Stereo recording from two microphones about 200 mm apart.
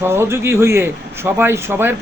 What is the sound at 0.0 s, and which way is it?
A man's voice, 10° right (ahead or behind).